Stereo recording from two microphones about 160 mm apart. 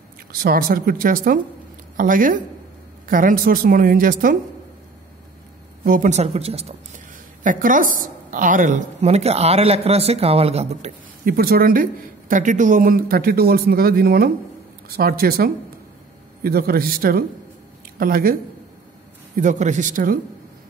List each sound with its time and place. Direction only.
0.3 s a woman's voice: 65° right (ahead or behind)
5.9 s a woman's voice: 50° right (ahead or behind)
7.4 s a woman's voice: 55° right (ahead or behind)
11.2 s speech: 70° right (ahead or behind)
19.3 s speech: 50° right (ahead or behind)